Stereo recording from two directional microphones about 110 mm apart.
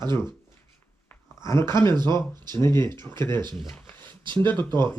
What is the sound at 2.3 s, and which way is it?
Speech, 40° right (ahead or behind).